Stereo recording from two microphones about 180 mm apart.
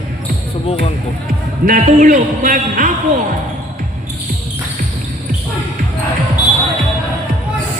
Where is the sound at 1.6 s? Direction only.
45° right (ahead or behind).